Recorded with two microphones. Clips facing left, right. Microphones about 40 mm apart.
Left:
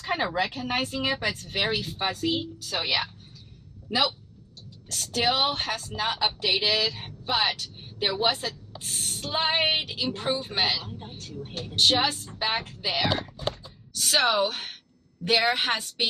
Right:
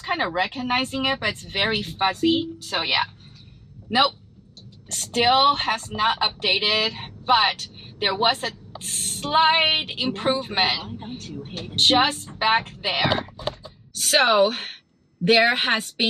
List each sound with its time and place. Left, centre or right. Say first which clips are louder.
0.0 s a woman's voice: right 3 dB; centre; by 3.1 s right
4.8 s a woman's voice: right 6 dB; right